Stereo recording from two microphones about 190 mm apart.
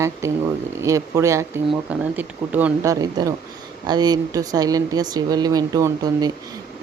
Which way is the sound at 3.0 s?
20° right (ahead or behind).